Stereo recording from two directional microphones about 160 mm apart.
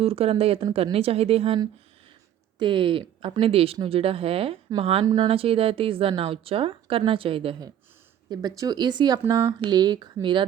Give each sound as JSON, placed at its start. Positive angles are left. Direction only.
{"t": 0.0, "sound": "speech", "side_deg": -35}
{"t": 2.6, "sound": "speech", "side_deg": -30}
{"t": 5.0, "sound": "speech", "side_deg": -25}